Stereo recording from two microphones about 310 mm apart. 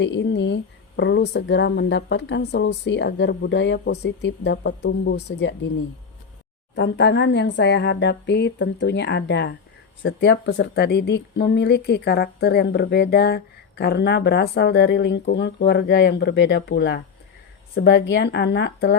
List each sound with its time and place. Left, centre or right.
0.0 s speech: left
6.7 s speech: left